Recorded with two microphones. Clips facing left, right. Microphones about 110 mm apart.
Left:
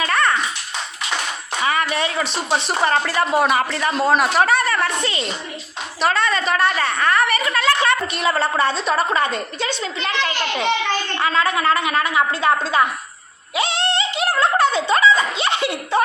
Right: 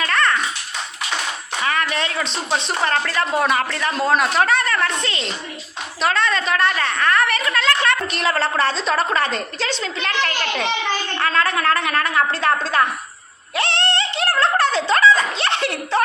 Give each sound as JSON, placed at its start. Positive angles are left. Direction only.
{"t": 0.0, "sound": "dog", "side_deg": 10}
{"t": 1.6, "sound": "a woman's voice", "side_deg": 5}
{"t": 13.6, "sound": "music", "side_deg": 10}
{"t": 15.2, "sound": "a sound", "side_deg": 5}